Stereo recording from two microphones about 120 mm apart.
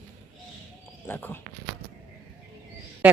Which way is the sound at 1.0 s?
15° left (ahead or behind).